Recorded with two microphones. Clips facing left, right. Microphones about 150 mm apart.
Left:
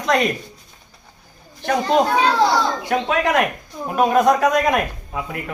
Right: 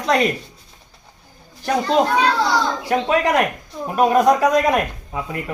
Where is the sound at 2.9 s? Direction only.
Centre (ahead or behind).